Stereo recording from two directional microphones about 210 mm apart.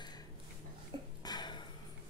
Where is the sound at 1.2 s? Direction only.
20° left (ahead or behind).